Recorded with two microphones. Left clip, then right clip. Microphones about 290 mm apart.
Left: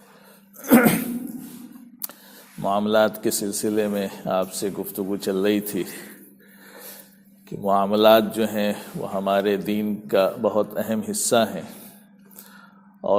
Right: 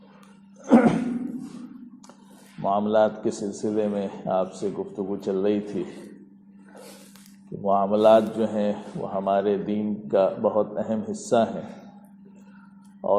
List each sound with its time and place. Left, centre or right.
0.6 s cough: left
2.6 s a man's voice: left
7.6 s a man's voice: left